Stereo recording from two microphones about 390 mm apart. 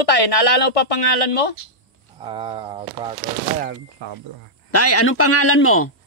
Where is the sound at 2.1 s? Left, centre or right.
Centre.